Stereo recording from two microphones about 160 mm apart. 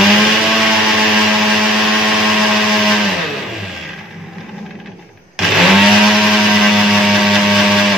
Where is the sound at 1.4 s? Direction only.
Centre (ahead or behind).